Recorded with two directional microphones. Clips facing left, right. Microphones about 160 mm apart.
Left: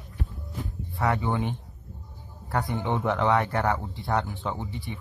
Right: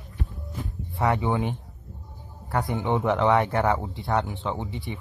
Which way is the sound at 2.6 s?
20° right (ahead or behind).